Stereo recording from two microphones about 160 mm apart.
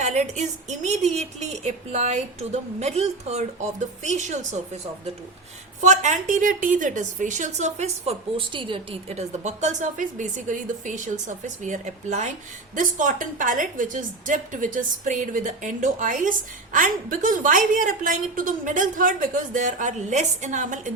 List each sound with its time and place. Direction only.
0.0 s a woman's voice: 45° right (ahead or behind)